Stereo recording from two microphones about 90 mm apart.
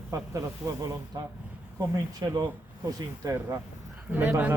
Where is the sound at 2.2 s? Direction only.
65° right (ahead or behind).